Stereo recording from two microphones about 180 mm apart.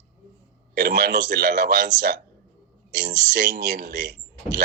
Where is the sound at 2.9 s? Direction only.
50° right (ahead or behind).